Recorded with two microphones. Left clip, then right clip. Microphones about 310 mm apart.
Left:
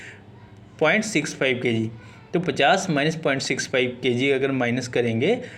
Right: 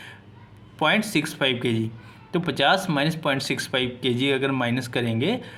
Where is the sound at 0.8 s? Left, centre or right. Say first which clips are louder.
Left 1 dB; right.